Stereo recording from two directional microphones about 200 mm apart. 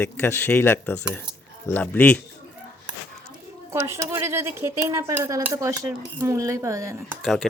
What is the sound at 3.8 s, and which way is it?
Speech, 15° right (ahead or behind).